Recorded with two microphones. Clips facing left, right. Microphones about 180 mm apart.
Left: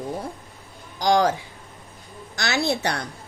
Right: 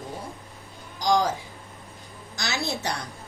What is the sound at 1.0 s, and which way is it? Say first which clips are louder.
Speech: left 4 dB; 70° left (ahead or behind).